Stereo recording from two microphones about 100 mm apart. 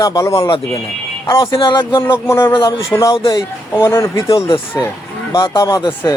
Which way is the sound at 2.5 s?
55° left (ahead or behind).